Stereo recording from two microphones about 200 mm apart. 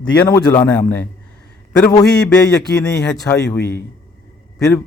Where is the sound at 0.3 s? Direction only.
10° left (ahead or behind).